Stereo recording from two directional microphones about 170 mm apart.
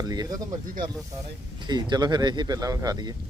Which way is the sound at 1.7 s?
25° right (ahead or behind).